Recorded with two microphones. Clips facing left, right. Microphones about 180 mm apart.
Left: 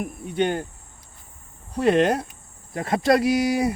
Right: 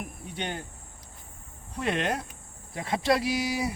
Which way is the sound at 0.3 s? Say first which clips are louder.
Left 12 dB; 50° left (ahead or behind).